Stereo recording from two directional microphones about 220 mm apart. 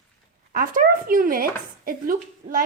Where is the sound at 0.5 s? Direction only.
40° right (ahead or behind).